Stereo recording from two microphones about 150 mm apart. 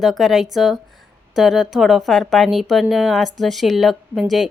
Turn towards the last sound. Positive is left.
turn(degrees=0)  # may be behind; listen again after turning